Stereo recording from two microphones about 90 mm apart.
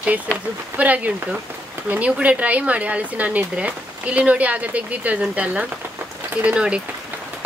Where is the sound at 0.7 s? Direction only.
15° right (ahead or behind).